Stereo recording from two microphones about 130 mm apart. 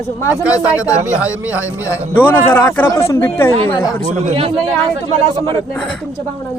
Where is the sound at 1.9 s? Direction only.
15° left (ahead or behind).